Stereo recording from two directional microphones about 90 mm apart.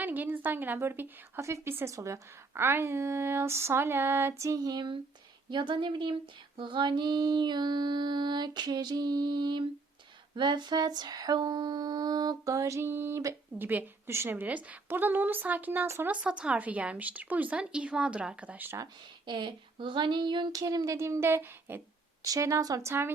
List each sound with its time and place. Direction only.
0.0 s a woman's voice: 20° right (ahead or behind); by 4.9 s 50° right (ahead or behind)
5.5 s female singing: 60° right (ahead or behind)
10.3 s a sound: 60° right (ahead or behind); by 13.2 s 25° right (ahead or behind)
13.6 s a woman's voice: 20° right (ahead or behind)
19.2 s female singing: 60° right (ahead or behind)
20.5 s a woman's voice: 40° right (ahead or behind); by 21.8 s 25° right (ahead or behind)
22.2 s a woman's voice: 40° right (ahead or behind)